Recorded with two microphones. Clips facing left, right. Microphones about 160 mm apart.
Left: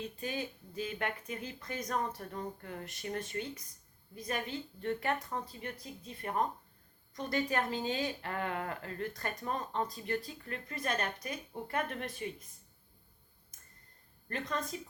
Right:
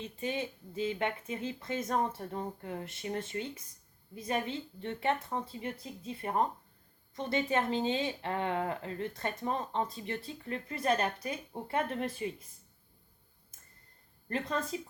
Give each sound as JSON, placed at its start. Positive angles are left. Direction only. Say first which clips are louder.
{"t": 0.0, "sound": "speech", "louder": "right 3 dB", "side_deg": -25}
{"t": 14.3, "sound": "speech", "louder": "right 3 dB", "side_deg": -30}